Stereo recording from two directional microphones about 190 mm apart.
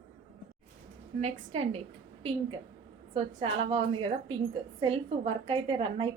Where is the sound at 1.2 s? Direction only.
35° right (ahead or behind).